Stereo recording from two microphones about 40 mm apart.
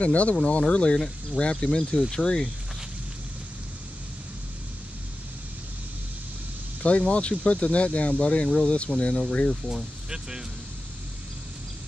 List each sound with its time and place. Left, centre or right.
0.0 s speech: left
0.9 s speech: centre
6.8 s speech: left
10.0 s speech: centre